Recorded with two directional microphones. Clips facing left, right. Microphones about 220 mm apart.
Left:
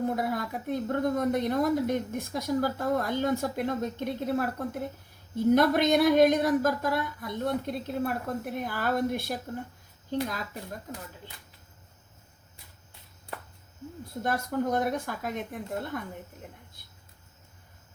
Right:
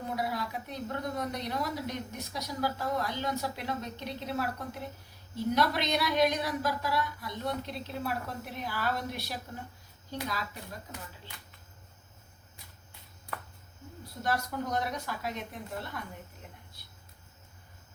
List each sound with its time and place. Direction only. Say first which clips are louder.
0.2 s a woman's voice: left 4 dB; 50° left (ahead or behind)
14.2 s a woman's voice: left 4 dB; 50° left (ahead or behind)